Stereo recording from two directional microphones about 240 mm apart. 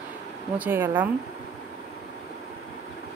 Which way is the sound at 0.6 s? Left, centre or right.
Centre.